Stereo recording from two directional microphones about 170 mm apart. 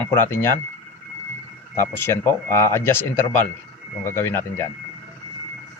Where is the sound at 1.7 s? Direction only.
15° left (ahead or behind).